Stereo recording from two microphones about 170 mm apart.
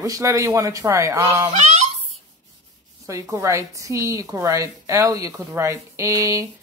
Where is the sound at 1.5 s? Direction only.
40° right (ahead or behind).